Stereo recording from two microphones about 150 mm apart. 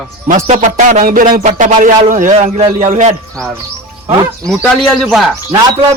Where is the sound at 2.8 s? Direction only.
55° right (ahead or behind).